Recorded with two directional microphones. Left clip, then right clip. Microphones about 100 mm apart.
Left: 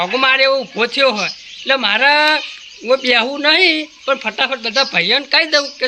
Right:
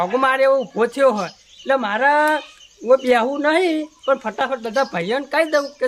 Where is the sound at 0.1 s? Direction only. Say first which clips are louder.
Left 4 dB; 25° right (ahead or behind).